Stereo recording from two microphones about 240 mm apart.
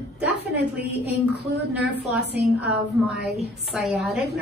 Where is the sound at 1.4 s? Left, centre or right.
Right.